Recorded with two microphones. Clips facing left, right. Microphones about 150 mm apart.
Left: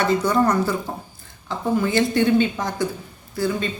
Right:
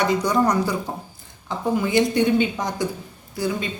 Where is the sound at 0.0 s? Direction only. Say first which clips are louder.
Left 1 dB; 15° right (ahead or behind).